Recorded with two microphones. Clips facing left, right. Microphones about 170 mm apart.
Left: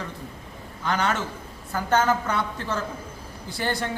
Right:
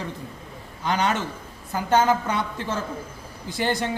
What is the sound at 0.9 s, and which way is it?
Speech, 15° right (ahead or behind).